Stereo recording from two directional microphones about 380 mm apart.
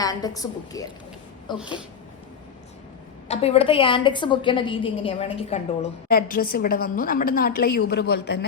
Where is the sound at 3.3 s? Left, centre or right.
Centre.